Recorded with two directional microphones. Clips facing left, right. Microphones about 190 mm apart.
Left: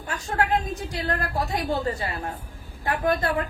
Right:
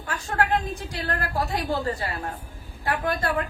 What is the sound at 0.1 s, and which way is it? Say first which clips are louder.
A woman's voice: even; 20° left (ahead or behind).